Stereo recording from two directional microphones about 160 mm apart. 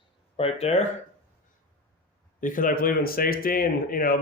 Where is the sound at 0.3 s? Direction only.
40° left (ahead or behind).